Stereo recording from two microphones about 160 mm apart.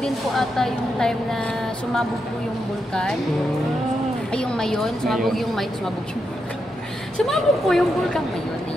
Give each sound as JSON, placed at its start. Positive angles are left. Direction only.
{"t": 0.0, "sound": "speech", "side_deg": 0}
{"t": 4.3, "sound": "speech", "side_deg": 5}
{"t": 7.2, "sound": "speech", "side_deg": 0}